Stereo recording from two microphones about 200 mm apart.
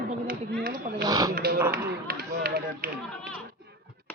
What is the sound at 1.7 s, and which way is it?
Run, 50° right (ahead or behind).